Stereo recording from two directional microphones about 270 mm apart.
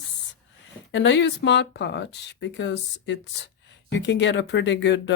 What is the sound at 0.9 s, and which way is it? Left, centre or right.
Speech, left.